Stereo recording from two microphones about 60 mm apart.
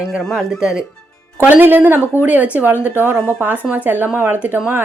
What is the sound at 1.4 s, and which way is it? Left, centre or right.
A woman's voice, right.